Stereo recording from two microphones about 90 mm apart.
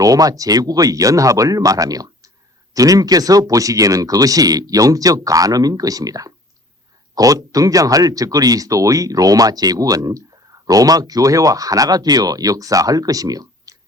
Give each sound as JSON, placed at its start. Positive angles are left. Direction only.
{"t": 0.0, "sound": "speech", "side_deg": -40}